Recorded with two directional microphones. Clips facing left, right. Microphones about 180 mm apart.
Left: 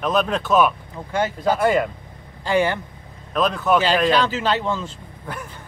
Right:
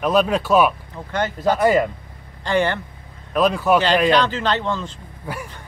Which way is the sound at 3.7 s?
10° left (ahead or behind).